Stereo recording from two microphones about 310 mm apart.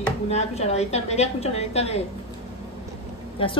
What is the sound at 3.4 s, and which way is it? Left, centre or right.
Speech, centre.